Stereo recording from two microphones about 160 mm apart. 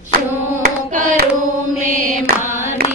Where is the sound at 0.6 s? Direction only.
65° right (ahead or behind).